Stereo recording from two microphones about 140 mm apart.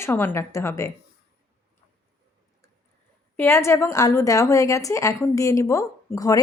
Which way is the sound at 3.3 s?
20° left (ahead or behind).